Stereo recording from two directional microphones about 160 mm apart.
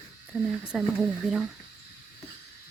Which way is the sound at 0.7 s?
5° right (ahead or behind).